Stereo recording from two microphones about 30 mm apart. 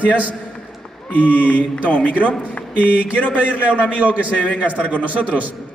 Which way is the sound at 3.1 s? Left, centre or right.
Left.